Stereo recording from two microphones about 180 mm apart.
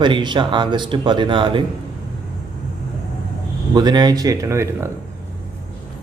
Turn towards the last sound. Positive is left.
turn(degrees=-15)  # may be behind; listen again after turning